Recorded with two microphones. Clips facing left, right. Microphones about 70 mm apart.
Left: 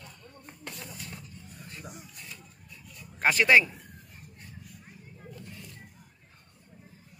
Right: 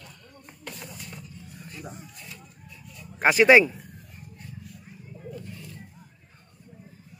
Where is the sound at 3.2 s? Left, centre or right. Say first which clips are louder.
Right 5 dB; centre.